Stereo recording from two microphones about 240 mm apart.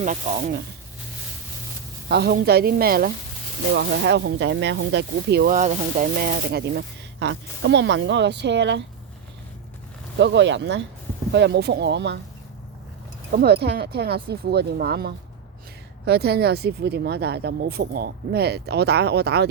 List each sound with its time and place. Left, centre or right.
0.0 s speech: right
2.0 s speech: right
10.2 s speech: right
13.3 s speech: right